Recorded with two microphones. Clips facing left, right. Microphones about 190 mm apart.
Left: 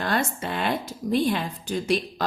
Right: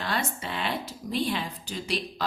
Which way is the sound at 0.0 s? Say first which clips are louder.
Left 5 dB; 50° left (ahead or behind).